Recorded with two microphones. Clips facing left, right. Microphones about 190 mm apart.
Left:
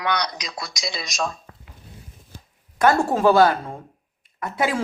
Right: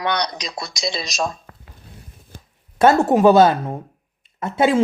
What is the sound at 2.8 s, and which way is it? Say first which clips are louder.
Speech: right 4 dB; 20° right (ahead or behind).